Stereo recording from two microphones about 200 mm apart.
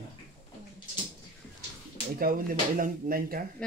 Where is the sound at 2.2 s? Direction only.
45° right (ahead or behind).